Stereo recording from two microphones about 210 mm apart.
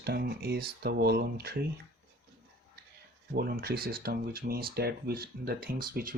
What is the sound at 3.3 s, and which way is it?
Speech, 45° right (ahead or behind).